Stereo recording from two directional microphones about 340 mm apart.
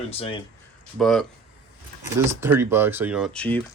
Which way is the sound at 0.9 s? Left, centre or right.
Centre.